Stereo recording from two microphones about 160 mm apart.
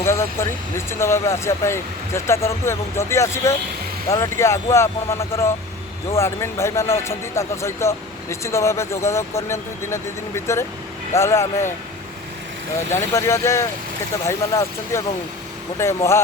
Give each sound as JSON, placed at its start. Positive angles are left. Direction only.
{"t": 0.0, "sound": "speech", "side_deg": 15}
{"t": 12.9, "sound": "speech", "side_deg": 15}